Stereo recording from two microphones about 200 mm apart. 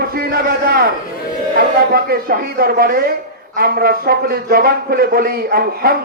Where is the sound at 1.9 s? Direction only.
50° right (ahead or behind).